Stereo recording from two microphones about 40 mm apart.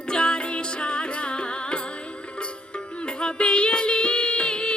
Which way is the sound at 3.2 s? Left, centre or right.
Left.